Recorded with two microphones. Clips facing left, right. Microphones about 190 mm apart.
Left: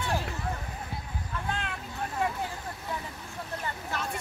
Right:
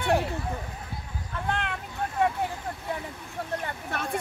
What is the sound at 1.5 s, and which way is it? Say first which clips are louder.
Vehicle: right 5 dB; 65° right (ahead or behind).